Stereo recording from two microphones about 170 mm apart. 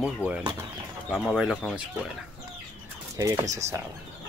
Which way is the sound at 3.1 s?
20° right (ahead or behind).